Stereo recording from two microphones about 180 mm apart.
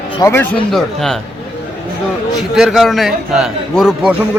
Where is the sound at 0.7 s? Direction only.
Centre (ahead or behind).